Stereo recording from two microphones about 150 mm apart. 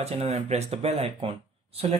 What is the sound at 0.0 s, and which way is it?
Speech, 45° right (ahead or behind).